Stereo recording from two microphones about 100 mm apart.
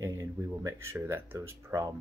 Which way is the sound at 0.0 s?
30° right (ahead or behind).